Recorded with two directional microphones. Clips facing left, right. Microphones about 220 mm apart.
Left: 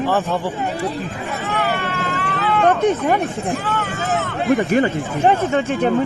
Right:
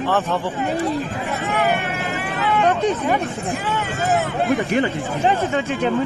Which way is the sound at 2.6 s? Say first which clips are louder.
Left 4 dB; 50° left (ahead or behind).